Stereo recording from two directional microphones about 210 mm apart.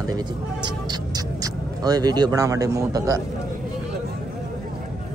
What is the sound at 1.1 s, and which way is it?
Speech, 20° right (ahead or behind).